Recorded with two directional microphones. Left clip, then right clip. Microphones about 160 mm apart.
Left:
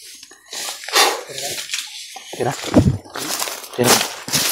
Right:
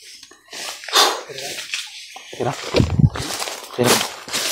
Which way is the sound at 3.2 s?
35° left (ahead or behind).